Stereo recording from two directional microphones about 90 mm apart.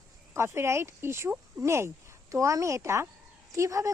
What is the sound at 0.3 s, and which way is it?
Speech, 30° right (ahead or behind).